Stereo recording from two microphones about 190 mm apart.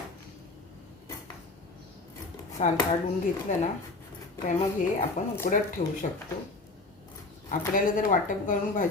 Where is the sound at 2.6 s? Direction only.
35° left (ahead or behind).